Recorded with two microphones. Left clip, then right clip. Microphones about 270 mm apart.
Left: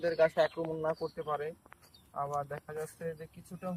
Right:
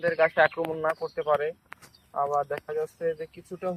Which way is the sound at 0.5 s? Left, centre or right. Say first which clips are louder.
Right 6 dB; right.